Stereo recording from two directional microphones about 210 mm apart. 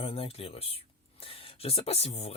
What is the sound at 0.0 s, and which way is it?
Speech, 25° left (ahead or behind).